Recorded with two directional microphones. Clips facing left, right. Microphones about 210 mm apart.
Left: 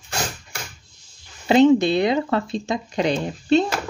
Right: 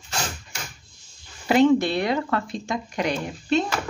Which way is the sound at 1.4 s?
20° left (ahead or behind).